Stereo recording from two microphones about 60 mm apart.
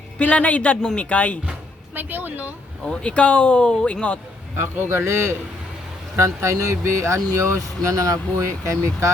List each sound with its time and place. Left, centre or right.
0.2 s speech: left
2.0 s speech: right
2.8 s speech: centre
4.5 s speech: right
7.6 s speech: right